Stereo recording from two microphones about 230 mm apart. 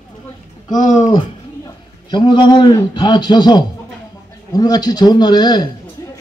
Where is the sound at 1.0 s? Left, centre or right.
Centre.